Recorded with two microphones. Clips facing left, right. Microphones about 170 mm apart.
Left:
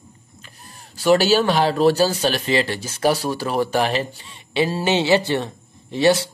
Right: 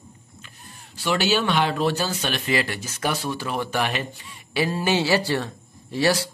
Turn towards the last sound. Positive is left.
turn(degrees=25)  # may be behind; listen again after turning